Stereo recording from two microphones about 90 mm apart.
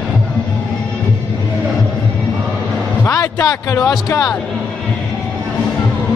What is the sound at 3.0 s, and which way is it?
Music, 45° left (ahead or behind).